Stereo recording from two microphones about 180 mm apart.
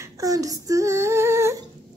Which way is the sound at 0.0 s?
20° right (ahead or behind).